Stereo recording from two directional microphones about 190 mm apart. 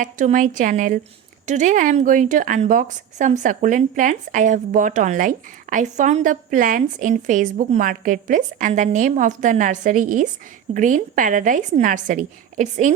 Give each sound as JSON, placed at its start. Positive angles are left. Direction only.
{"t": 0.0, "sound": "a woman's voice", "side_deg": -40}